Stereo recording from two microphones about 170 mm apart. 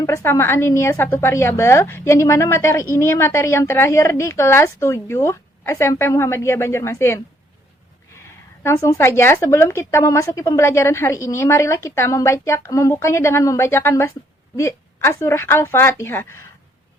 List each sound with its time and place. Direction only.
0.0 s speech: 15° left (ahead or behind)